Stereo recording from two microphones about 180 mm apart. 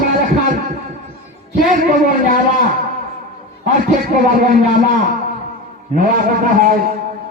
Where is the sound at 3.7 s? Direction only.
50° right (ahead or behind).